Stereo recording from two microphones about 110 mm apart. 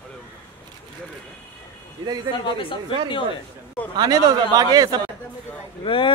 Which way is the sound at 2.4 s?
50° left (ahead or behind).